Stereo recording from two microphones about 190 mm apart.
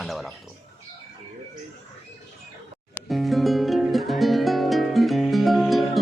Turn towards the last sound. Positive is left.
turn(degrees=0)  # may be behind; listen again after turning